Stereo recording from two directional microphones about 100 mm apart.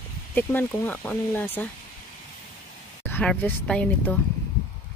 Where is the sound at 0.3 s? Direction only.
20° left (ahead or behind).